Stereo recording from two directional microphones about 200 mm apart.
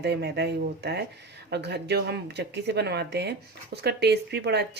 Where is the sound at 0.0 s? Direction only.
55° right (ahead or behind).